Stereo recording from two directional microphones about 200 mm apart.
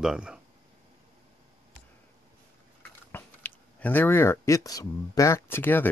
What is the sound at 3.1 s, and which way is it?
Speech, 10° left (ahead or behind).